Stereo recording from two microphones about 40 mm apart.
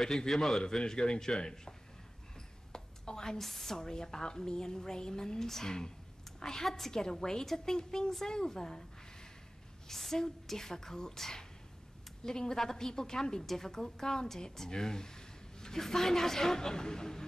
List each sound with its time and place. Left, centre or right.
0.0 s speech: centre
2.7 s a sound: centre
3.3 s speech: centre
9.8 s speech: centre